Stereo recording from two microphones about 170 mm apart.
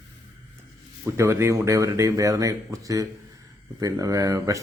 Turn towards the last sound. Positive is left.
turn(degrees=-20)  # may be behind; listen again after turning